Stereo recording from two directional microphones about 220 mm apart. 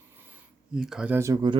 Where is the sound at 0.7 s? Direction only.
5° right (ahead or behind).